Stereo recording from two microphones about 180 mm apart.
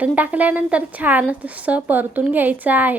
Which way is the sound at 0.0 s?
10° right (ahead or behind).